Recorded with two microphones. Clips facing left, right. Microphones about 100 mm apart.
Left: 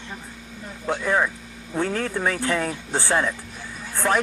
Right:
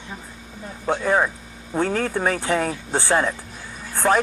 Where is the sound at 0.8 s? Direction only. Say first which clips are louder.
Right 2 dB; 35° right (ahead or behind).